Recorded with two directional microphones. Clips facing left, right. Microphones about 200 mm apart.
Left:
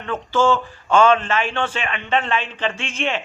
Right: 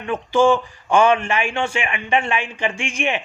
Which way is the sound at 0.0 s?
15° right (ahead or behind).